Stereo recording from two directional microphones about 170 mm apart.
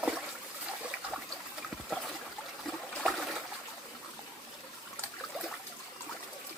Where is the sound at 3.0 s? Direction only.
5° left (ahead or behind).